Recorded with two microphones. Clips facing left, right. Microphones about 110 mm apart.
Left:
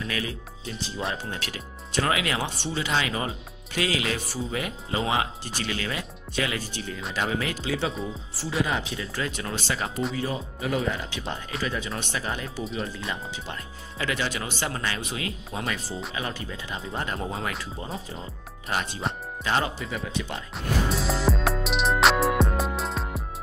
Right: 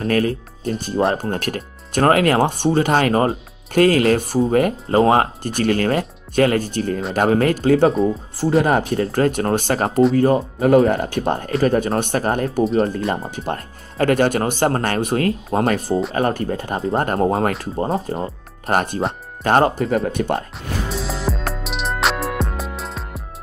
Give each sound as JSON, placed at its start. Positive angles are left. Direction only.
{"t": 0.0, "sound": "speech", "side_deg": -50}
{"t": 20.9, "sound": "music", "side_deg": 0}